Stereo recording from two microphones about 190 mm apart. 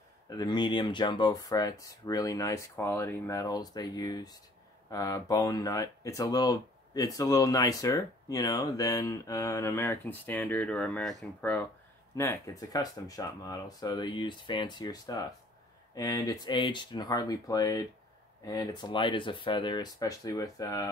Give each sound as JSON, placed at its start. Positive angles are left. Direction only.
{"t": 0.3, "sound": "speech", "side_deg": 20}
{"t": 12.2, "sound": "speech", "side_deg": 15}